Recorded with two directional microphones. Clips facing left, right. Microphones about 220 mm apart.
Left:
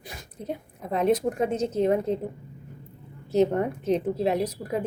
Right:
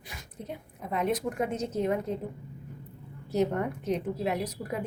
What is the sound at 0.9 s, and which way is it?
A woman's voice, 30° left (ahead or behind).